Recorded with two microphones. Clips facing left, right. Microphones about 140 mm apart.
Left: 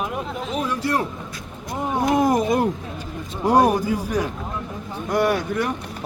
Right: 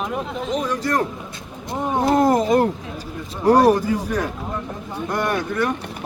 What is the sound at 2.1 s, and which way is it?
Speech, 10° left (ahead or behind).